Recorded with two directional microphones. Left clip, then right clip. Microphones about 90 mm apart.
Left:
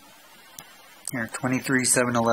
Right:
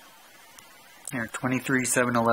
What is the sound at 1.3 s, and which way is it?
Speech, 5° left (ahead or behind).